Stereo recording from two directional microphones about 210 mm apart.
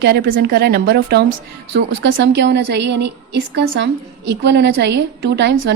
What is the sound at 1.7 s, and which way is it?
A woman's voice, 60° right (ahead or behind).